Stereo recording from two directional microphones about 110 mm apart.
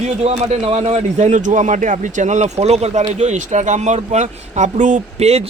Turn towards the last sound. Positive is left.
turn(degrees=-75)  # may be behind; listen again after turning